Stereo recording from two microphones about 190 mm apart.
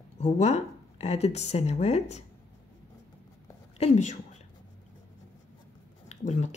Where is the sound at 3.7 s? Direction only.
35° left (ahead or behind).